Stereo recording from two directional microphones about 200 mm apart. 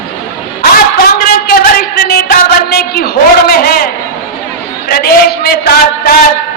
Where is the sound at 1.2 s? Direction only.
50° left (ahead or behind).